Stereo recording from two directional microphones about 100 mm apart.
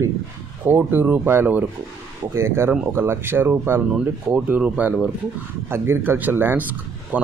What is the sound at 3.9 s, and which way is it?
Speech, 10° right (ahead or behind).